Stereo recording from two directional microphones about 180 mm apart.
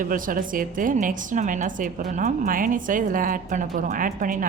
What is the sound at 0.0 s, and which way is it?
A woman's voice, 50° right (ahead or behind).